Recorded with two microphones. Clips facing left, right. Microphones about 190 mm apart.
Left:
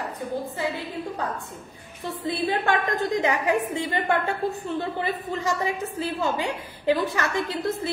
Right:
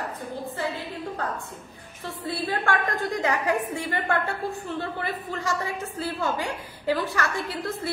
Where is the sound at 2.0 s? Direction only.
20° left (ahead or behind).